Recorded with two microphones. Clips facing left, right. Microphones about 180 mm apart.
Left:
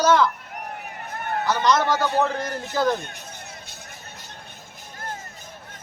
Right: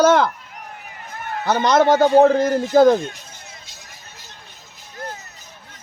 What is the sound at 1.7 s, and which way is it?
A man's voice, 55° right (ahead or behind).